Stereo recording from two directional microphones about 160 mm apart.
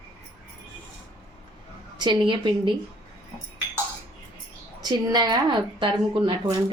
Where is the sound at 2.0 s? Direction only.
30° right (ahead or behind).